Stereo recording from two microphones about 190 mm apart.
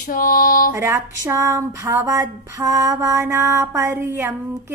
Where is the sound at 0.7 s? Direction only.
15° right (ahead or behind).